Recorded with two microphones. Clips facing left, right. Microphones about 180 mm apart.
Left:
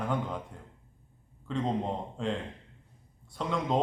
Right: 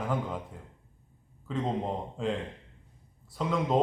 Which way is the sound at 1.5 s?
5° right (ahead or behind).